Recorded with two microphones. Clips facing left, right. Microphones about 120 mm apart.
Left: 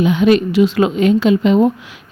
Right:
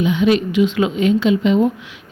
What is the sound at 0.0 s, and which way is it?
A woman's voice, 50° left (ahead or behind).